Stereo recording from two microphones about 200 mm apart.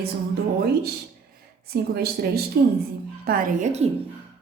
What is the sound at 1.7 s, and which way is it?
A woman's voice, 50° right (ahead or behind).